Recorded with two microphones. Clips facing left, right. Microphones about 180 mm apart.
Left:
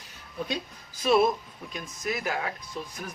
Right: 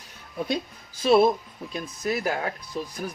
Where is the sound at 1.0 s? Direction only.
30° right (ahead or behind).